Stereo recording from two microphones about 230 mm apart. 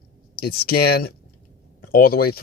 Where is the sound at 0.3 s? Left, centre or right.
Left.